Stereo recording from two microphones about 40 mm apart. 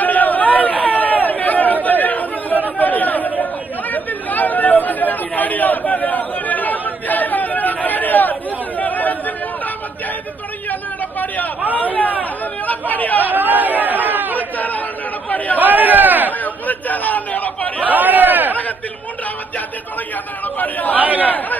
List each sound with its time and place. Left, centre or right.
0.0 s chatter: left
10.7 s a sound: left
11.7 s chatter: left
13.3 s chatter: right
15.3 s chatter: left
15.6 s a sound: right
16.3 s chatter: left
17.8 s a sound: right
20.5 s speech: left
21.0 s a man's voice: right